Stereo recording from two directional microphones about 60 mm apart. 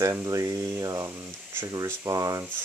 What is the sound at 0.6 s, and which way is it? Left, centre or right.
Speech, right.